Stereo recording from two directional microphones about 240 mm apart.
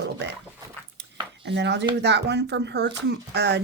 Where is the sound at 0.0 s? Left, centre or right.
Right.